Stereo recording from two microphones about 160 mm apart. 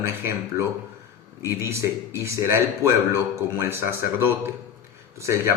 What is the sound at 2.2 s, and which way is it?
Speech, 15° right (ahead or behind).